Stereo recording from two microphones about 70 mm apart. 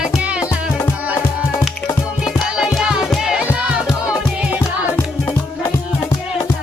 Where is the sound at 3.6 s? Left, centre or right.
Centre.